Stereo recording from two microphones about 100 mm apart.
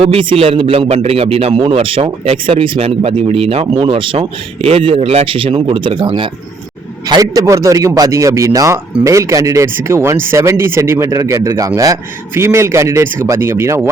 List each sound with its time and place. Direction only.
0.0 s speech: 70° right (ahead or behind)
7.1 s a man's voice: 35° right (ahead or behind)